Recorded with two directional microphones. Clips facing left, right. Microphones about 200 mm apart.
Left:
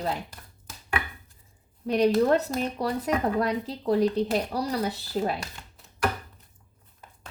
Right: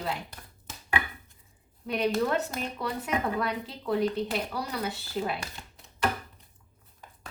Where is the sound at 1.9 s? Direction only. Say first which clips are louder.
Left 6 dB; 35° left (ahead or behind).